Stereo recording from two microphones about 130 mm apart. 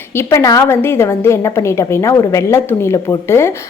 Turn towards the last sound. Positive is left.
turn(degrees=20)  # may be behind; listen again after turning